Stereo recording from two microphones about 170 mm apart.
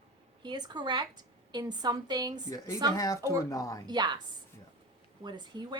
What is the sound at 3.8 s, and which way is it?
Speech, 25° right (ahead or behind).